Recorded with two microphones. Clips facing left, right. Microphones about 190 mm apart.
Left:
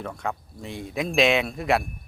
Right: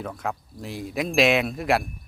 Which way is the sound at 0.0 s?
Centre (ahead or behind).